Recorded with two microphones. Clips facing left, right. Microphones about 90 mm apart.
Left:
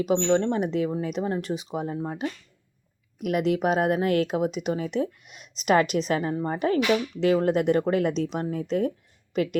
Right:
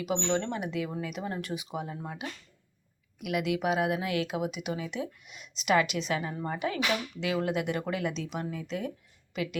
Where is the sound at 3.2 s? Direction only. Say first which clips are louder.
Left 6 dB; 40° left (ahead or behind).